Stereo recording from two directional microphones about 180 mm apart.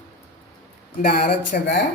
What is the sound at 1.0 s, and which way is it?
Speech, 60° left (ahead or behind).